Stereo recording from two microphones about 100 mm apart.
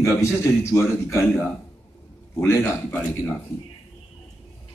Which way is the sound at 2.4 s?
25° left (ahead or behind).